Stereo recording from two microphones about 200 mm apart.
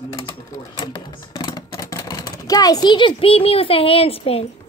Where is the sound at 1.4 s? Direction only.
20° left (ahead or behind).